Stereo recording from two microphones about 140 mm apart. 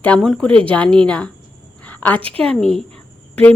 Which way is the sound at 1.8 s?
10° left (ahead or behind).